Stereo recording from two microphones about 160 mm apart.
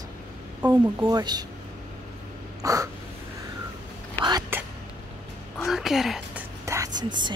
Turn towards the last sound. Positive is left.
turn(degrees=-25)  # may be behind; listen again after turning